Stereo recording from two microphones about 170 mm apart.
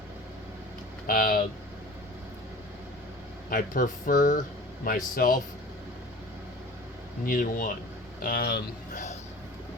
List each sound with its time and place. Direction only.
1.0 s speech: 55° left (ahead or behind)
3.5 s speech: 55° left (ahead or behind)
7.3 s speech: 55° left (ahead or behind)
8.2 s speech: 65° left (ahead or behind)
8.9 s a sound: 45° left (ahead or behind)